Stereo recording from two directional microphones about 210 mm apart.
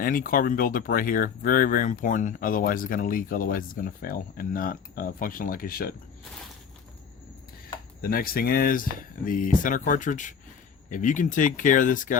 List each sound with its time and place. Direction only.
0.0 s speech: 40° left (ahead or behind)
8.0 s speech: 45° left (ahead or behind)